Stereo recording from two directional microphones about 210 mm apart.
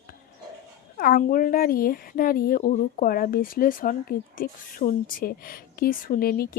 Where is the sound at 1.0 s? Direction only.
45° left (ahead or behind).